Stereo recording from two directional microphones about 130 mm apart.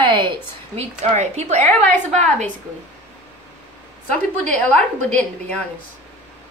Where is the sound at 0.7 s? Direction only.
60° right (ahead or behind).